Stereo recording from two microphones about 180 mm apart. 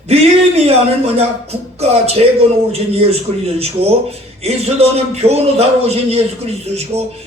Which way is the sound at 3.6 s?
35° right (ahead or behind).